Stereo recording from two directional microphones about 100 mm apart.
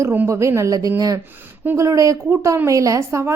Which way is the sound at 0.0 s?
25° right (ahead or behind).